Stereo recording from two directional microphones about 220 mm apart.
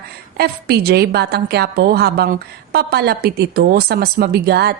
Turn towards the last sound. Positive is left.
turn(degrees=-45)  # may be behind; listen again after turning